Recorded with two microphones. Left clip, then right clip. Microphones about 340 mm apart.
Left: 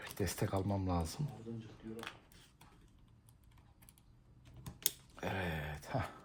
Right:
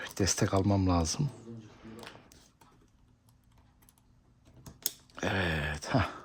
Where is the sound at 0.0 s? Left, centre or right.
Right.